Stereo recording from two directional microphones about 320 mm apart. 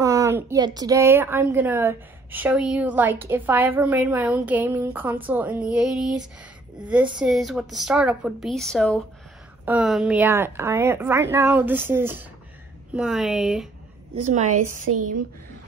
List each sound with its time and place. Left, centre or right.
0.0 s a sound: centre
0.7 s a woman's voice: centre
14.9 s speech: right